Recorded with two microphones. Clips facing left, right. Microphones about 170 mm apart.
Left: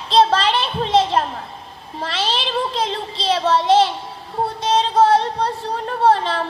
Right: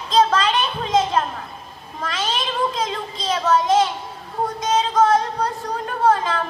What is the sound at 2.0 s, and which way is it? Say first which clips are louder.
Child singing: left 1 dB; 30° left (ahead or behind).